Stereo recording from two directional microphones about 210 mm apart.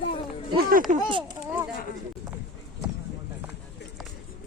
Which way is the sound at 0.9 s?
40° right (ahead or behind).